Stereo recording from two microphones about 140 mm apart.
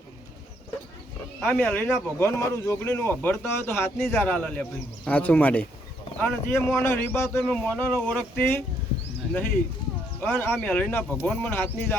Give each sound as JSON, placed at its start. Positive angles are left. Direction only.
{"t": 1.4, "sound": "speech", "side_deg": 10}
{"t": 10.2, "sound": "speech", "side_deg": 15}